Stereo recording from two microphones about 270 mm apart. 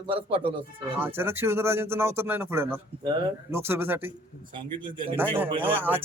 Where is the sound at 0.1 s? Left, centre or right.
Centre.